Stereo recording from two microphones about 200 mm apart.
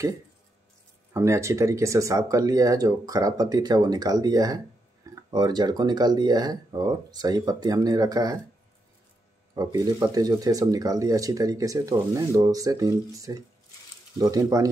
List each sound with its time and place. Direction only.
1.1 s speech: 15° right (ahead or behind)
9.6 s speech: 15° right (ahead or behind)